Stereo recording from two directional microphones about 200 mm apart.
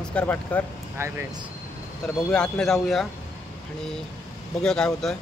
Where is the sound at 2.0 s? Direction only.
Centre (ahead or behind).